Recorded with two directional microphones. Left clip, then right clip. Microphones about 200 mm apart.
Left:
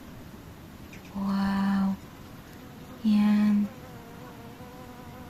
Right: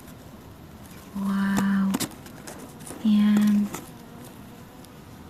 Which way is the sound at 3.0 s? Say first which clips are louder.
Right 3 dB; centre (ahead or behind).